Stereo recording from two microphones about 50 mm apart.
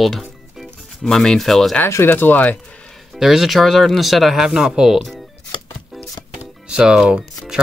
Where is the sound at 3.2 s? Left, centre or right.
Centre.